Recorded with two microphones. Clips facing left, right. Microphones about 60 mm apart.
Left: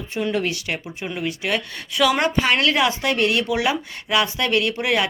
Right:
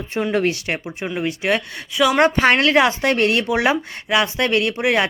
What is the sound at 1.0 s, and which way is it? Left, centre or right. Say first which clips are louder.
Speech: right 3 dB; centre.